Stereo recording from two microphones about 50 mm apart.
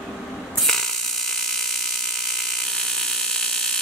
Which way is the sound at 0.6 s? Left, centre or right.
Centre.